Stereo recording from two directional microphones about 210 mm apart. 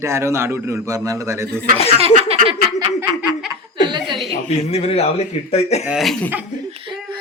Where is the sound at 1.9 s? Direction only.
30° right (ahead or behind).